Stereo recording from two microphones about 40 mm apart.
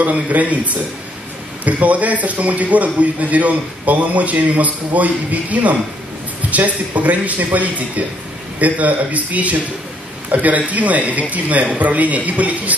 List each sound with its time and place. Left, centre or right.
0.0 s a man's voice: right